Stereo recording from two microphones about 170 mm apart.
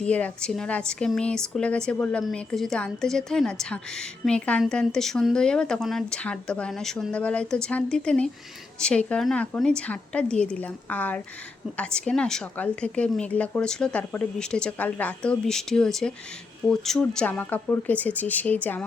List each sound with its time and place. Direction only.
0.0 s a woman's voice: 5° left (ahead or behind)